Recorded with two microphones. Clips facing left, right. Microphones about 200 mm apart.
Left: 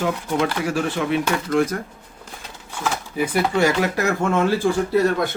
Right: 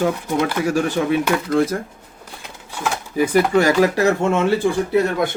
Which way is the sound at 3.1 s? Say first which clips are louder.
Right 6 dB; 40° right (ahead or behind).